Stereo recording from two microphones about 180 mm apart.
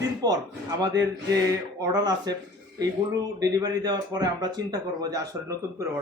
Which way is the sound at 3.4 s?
20° right (ahead or behind).